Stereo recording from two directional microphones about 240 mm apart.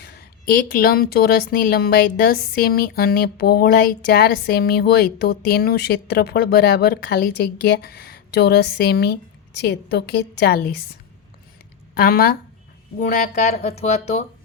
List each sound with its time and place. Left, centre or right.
0.0 s a woman's voice: left
11.9 s speech: left